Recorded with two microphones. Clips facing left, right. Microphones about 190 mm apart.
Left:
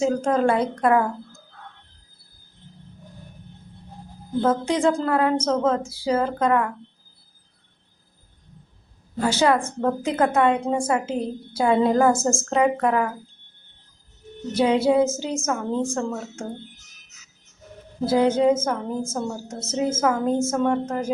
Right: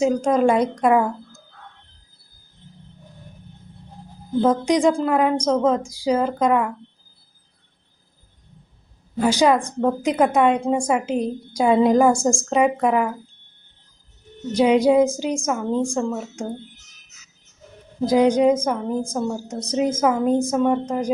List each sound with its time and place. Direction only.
0.0 s a woman's voice: 15° right (ahead or behind)
4.4 s a woman's voice: 15° right (ahead or behind)
9.1 s a woman's voice: 15° right (ahead or behind)
14.5 s a woman's voice: 15° right (ahead or behind)
18.0 s a woman's voice: 15° right (ahead or behind)